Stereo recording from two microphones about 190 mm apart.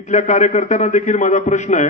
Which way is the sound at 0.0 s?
40° left (ahead or behind).